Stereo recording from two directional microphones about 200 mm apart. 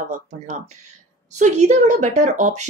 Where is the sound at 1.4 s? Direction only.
35° right (ahead or behind).